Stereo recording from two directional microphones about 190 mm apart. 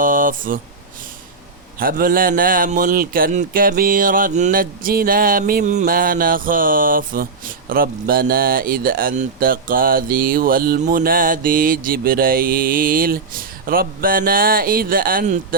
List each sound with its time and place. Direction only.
0.0 s speech: 45° right (ahead or behind)
1.8 s speech: 50° right (ahead or behind)